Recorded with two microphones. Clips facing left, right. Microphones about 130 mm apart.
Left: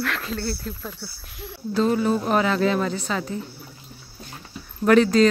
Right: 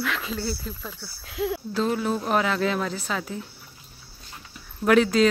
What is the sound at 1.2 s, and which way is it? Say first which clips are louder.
Speech: right 12 dB; 90° right.